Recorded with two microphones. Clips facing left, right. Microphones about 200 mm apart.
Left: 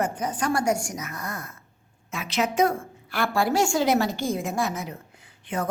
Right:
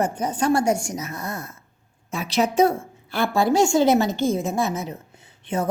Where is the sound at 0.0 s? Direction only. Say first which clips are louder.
Right 4 dB; 30° right (ahead or behind).